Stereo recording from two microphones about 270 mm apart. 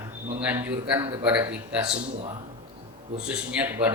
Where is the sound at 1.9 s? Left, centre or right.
Centre.